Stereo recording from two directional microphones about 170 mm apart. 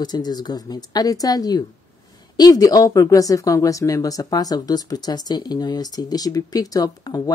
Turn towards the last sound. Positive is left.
turn(degrees=20)  # may be behind; listen again after turning